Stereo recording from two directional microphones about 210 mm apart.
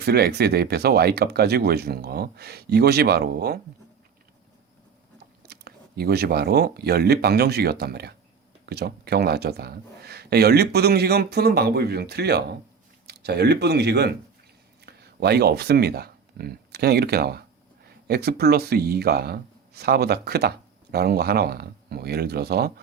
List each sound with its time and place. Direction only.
0.0 s speech: 50° right (ahead or behind)
5.5 s speech: 50° right (ahead or behind)